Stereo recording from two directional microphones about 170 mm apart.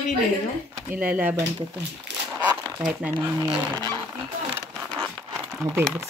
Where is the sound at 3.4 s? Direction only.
20° right (ahead or behind).